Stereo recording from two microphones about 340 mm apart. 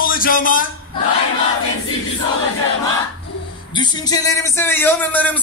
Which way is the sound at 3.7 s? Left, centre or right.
Centre.